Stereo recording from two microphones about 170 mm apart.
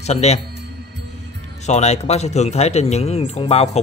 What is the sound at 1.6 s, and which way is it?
Speech, 40° left (ahead or behind).